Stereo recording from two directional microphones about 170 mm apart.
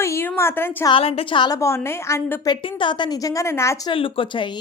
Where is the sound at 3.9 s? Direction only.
30° left (ahead or behind).